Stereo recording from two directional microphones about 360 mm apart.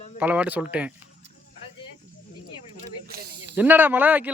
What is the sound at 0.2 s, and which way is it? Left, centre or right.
Speech, centre.